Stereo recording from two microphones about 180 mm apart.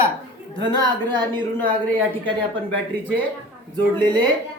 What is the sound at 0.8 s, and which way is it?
Speech, 25° right (ahead or behind).